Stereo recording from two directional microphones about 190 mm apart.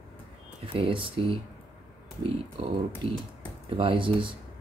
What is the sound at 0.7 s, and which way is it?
Speech, 25° right (ahead or behind).